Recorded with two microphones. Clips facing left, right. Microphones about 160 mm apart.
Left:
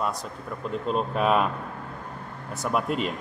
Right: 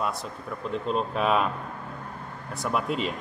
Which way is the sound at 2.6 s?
Centre (ahead or behind).